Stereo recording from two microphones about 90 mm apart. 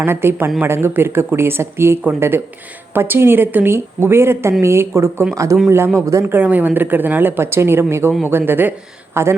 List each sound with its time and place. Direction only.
0.0 s speech: 25° right (ahead or behind)
6.3 s speech: 20° right (ahead or behind)